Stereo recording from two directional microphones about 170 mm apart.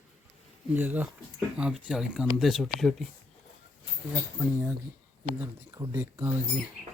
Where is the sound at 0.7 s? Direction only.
10° right (ahead or behind).